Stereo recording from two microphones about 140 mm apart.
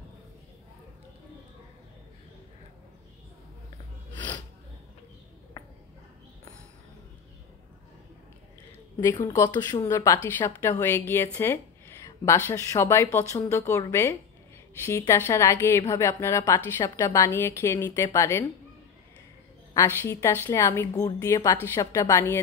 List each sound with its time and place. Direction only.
9.0 s a woman's voice: 25° left (ahead or behind)
19.7 s a woman's voice: 20° left (ahead or behind)